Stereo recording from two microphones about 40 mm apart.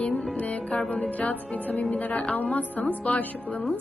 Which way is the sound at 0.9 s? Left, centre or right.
Left.